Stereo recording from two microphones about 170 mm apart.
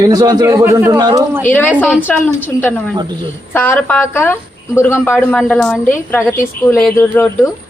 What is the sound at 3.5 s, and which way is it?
Speech, 10° left (ahead or behind).